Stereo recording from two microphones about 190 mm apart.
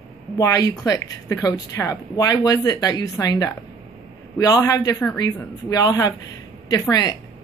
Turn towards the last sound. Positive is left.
turn(degrees=20)  # may be behind; listen again after turning